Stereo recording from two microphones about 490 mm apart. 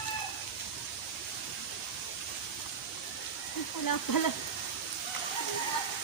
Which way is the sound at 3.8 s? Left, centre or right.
Left.